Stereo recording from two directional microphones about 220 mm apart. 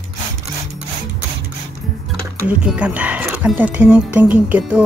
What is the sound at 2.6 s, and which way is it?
Speech, 5° right (ahead or behind).